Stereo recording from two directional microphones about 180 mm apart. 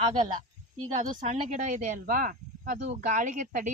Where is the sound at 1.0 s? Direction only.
40° right (ahead or behind).